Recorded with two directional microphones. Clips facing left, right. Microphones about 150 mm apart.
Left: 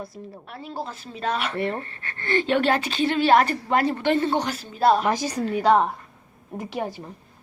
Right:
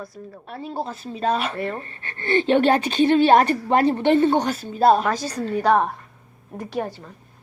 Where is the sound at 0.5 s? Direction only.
20° right (ahead or behind).